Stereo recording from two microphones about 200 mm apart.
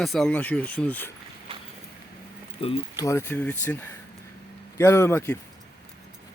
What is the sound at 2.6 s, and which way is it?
Speech, 30° left (ahead or behind).